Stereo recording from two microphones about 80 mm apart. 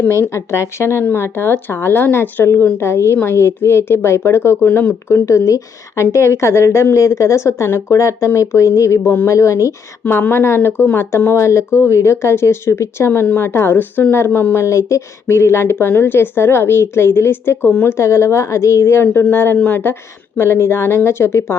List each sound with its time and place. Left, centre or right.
0.1 s speech: left
4.6 s speech: centre
5.0 s speech: left
10.0 s speech: left